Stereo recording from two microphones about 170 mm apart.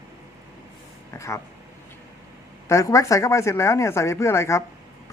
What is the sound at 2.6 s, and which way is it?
A man's voice, 20° left (ahead or behind).